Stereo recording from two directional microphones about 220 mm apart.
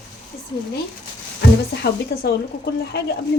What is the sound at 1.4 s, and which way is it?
Speech, 50° left (ahead or behind).